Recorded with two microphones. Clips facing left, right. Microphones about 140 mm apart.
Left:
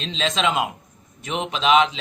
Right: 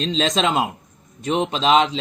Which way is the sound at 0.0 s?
40° right (ahead or behind).